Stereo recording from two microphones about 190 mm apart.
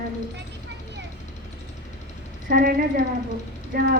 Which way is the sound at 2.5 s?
45° right (ahead or behind).